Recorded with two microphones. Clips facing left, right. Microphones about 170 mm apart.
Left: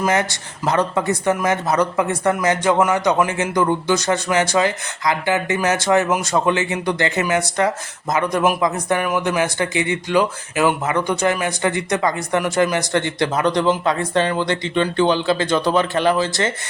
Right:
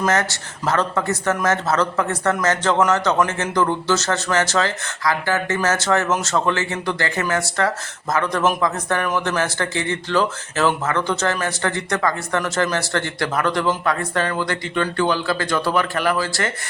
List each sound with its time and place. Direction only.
0.0 s speech: 15° left (ahead or behind)